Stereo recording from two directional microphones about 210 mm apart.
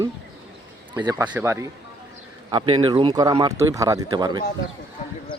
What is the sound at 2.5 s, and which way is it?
Speech, 25° right (ahead or behind).